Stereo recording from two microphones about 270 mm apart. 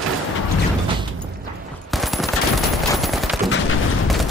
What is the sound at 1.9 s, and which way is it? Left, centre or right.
Fusillade, centre.